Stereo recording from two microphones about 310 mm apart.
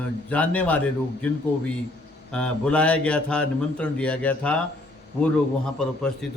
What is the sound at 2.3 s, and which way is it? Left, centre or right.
A man's voice, centre.